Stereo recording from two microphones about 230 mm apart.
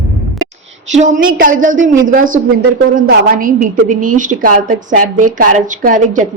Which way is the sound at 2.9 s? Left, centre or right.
Right.